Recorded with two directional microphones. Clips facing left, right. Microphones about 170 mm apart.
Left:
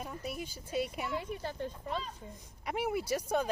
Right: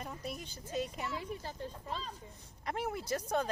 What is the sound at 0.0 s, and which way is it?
Speech, 5° left (ahead or behind).